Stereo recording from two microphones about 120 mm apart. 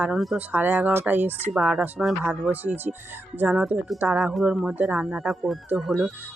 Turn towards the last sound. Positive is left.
turn(degrees=0)  # may be behind; listen again after turning